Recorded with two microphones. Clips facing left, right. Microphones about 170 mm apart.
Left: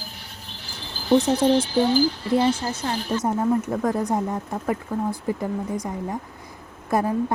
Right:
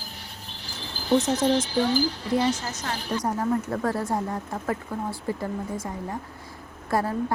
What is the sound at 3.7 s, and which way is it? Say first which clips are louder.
Speech: left 3 dB; 15° left (ahead or behind).